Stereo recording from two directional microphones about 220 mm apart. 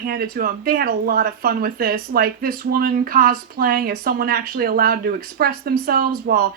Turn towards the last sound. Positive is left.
turn(degrees=-45)  # may be behind; listen again after turning